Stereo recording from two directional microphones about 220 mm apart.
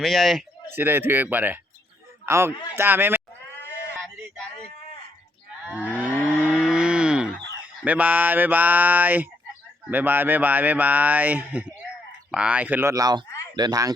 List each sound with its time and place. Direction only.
0.0 s speech: centre (ahead or behind)
3.6 s a sound: 10° left (ahead or behind)
5.6 s speech: 5° right (ahead or behind)
6.1 s cattle: centre (ahead or behind)
7.9 s speech: 5° right (ahead or behind)